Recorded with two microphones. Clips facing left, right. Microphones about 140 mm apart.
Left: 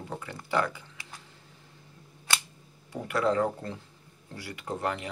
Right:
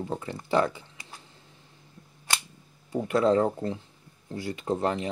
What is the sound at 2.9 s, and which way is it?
Speech, 25° right (ahead or behind).